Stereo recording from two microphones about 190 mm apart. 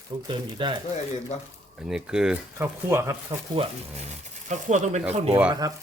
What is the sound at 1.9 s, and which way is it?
Speech, 5° right (ahead or behind).